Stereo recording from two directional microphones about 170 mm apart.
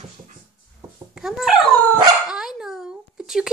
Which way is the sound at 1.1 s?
5° right (ahead or behind).